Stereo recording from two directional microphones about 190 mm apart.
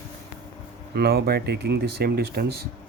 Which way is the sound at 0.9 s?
55° right (ahead or behind).